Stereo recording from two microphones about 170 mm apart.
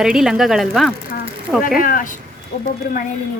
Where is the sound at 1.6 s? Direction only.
55° left (ahead or behind).